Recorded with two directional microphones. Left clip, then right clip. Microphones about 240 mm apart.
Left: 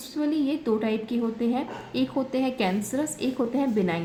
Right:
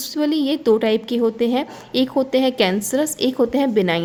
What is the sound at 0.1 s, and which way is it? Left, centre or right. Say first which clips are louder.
A woman's voice: right 6 dB; right.